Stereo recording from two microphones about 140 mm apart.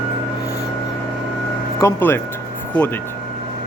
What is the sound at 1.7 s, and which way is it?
Speech, 20° left (ahead or behind).